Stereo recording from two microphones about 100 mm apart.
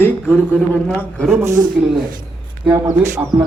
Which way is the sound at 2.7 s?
25° right (ahead or behind).